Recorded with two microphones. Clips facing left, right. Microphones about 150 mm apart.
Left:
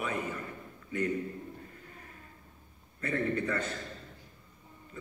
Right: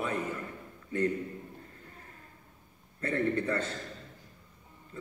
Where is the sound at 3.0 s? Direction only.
30° right (ahead or behind).